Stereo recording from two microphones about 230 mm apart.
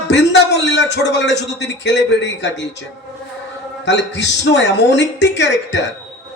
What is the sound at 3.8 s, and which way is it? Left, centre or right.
A man's voice, left.